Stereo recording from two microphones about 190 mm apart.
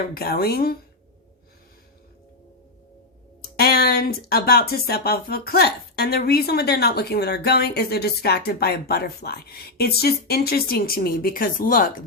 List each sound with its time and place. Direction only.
0.1 s speech: 55° left (ahead or behind)
3.6 s speech: 55° left (ahead or behind)